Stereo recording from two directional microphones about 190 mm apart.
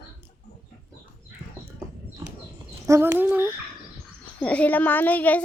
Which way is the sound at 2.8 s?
15° right (ahead or behind).